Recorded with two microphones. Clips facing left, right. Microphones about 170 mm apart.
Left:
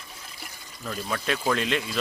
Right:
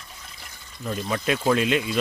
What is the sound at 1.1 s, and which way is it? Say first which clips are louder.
Speech: right 4 dB; 10° right (ahead or behind).